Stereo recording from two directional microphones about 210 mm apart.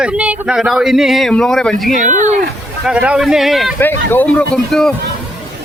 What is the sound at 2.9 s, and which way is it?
Speech, 5° right (ahead or behind).